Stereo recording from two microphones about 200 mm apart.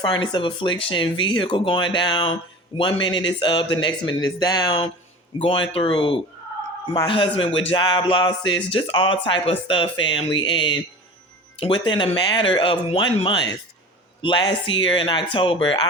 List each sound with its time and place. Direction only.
0.0 s speech: 20° left (ahead or behind)